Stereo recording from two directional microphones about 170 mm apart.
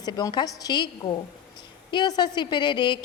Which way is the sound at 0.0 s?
25° left (ahead or behind).